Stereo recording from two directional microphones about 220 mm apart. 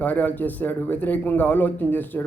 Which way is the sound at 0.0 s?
5° left (ahead or behind).